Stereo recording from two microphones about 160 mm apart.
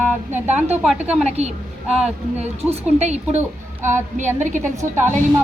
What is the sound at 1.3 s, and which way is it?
Speech, 40° right (ahead or behind).